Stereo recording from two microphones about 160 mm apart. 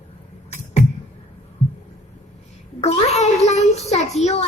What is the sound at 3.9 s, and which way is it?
Child singing, 45° left (ahead or behind).